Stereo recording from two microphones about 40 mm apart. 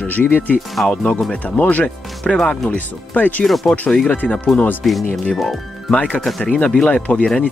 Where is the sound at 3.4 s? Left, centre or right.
Centre.